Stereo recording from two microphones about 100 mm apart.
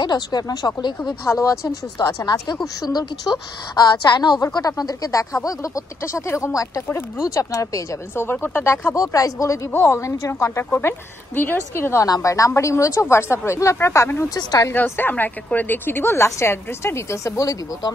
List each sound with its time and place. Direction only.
0.0 s a woman's voice: 45° left (ahead or behind)
1.2 s a woman's voice: 30° left (ahead or behind)
14.3 s speech: 35° left (ahead or behind)
14.7 s speech: 20° left (ahead or behind); by 17.9 s 35° left (ahead or behind)